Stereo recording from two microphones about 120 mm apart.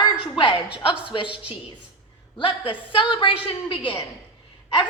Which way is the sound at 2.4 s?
45° left (ahead or behind).